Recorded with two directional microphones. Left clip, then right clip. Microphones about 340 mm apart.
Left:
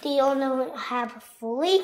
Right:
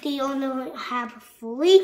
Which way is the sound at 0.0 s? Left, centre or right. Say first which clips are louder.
Left 4 dB; centre.